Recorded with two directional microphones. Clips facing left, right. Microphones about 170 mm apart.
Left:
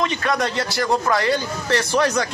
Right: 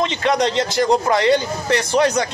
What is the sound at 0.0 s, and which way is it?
A man's voice, 25° right (ahead or behind).